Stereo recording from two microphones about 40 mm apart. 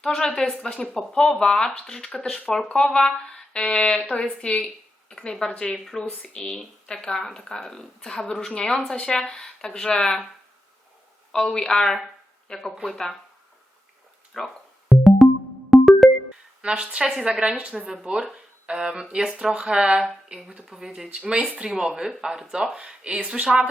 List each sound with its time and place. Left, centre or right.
0.0 s speech: centre
2.1 s speech: centre
2.7 s speech: left
11.3 s speech: centre
12.8 s speech: centre
14.3 s music: centre
16.6 s speech: right
17.0 s speech: centre
17.7 s speech: centre
21.1 s speech: right
22.5 s speech: right